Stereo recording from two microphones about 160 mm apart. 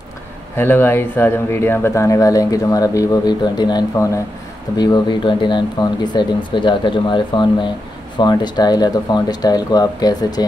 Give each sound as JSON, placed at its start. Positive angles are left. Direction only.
{"t": 0.6, "sound": "speech", "side_deg": 15}